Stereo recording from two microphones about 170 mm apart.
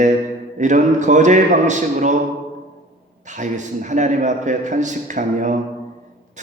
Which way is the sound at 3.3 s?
45° right (ahead or behind).